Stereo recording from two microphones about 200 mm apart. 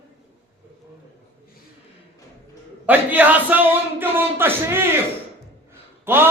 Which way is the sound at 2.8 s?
10° right (ahead or behind).